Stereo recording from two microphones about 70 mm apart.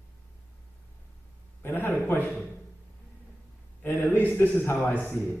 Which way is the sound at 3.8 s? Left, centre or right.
Left.